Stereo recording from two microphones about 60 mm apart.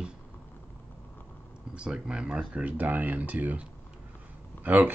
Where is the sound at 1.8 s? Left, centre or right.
Centre.